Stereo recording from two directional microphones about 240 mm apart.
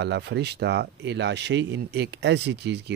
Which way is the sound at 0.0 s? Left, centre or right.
Right.